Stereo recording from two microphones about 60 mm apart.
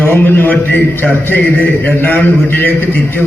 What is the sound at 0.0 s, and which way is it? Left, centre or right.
Speech, left.